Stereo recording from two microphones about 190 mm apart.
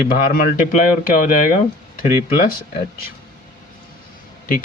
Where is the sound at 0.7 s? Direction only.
45° left (ahead or behind).